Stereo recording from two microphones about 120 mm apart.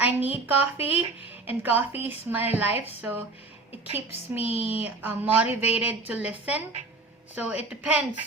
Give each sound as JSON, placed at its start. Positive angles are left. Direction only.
{"t": 0.0, "sound": "a woman's voice", "side_deg": -15}